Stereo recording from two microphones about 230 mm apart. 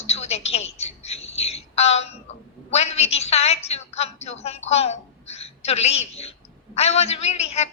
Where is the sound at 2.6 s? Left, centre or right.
Left.